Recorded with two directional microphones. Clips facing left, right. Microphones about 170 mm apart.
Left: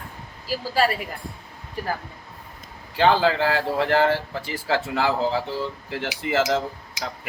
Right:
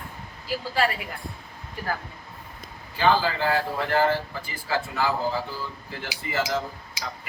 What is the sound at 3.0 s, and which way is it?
Speech, 70° left (ahead or behind).